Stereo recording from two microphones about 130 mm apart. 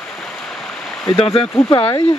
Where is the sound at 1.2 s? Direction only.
45° left (ahead or behind).